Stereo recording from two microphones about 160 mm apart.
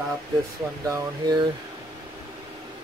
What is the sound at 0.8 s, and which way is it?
Speech, 20° right (ahead or behind).